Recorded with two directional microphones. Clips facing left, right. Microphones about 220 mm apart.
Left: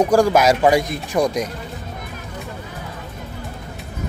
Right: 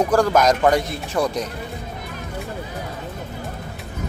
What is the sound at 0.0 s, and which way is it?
Speech, 15° left (ahead or behind).